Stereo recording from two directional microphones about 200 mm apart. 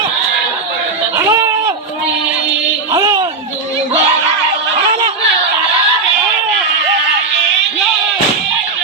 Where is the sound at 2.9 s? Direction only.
15° right (ahead or behind).